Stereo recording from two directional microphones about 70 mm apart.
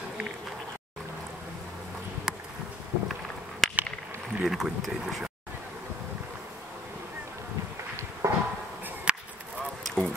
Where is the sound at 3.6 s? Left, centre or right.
Centre.